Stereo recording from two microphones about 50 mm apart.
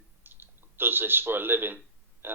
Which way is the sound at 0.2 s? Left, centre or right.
Right.